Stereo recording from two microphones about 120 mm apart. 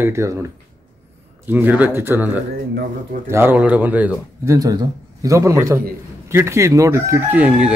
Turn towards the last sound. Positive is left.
turn(degrees=-10)  # may be behind; listen again after turning